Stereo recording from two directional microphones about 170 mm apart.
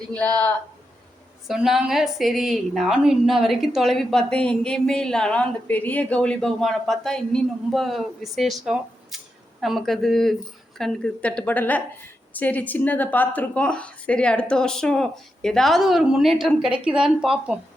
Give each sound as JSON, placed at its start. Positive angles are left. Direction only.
{"t": 0.1, "sound": "a woman's voice", "side_deg": 5}